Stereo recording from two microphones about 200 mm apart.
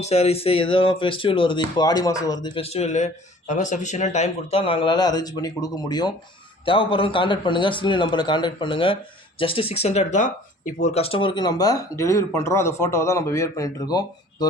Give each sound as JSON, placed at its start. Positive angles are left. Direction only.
{"t": 0.0, "sound": "speech", "side_deg": 35}